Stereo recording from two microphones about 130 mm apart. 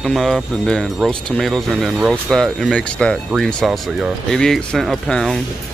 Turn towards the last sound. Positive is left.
turn(degrees=5)  # may be behind; listen again after turning